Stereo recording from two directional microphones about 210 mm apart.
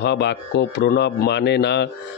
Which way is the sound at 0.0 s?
55° left (ahead or behind).